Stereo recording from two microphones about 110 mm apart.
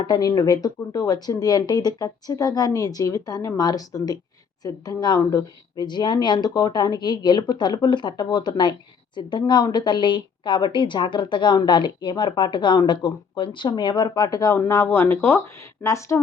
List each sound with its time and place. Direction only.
0.0 s a woman's voice: 35° left (ahead or behind)